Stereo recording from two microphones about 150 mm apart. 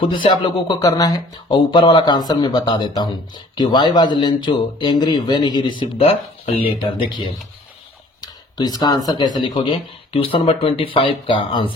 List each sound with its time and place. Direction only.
0.1 s speech: 35° left (ahead or behind)
6.0 s speech: 45° left (ahead or behind)
8.2 s speech: 25° left (ahead or behind)